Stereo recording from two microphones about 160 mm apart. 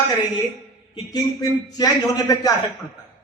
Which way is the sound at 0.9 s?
25° left (ahead or behind).